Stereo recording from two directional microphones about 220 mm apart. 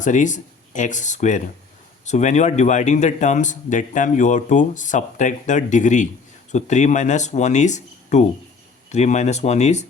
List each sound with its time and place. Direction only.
0.0 s speech: 35° left (ahead or behind)